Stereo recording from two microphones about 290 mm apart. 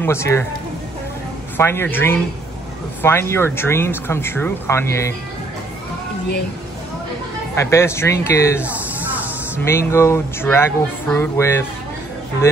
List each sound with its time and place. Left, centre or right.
0.0 s speech: centre
1.6 s speech: centre
7.6 s speech: centre
9.7 s speech: centre